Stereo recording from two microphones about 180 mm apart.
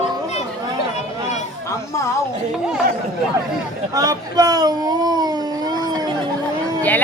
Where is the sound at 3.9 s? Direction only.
20° right (ahead or behind).